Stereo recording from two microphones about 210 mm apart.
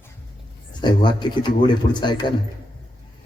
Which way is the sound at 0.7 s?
20° left (ahead or behind).